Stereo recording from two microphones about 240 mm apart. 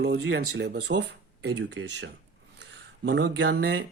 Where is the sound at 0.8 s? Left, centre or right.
Right.